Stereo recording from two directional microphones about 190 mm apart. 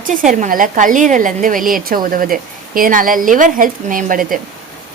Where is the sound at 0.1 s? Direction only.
45° right (ahead or behind).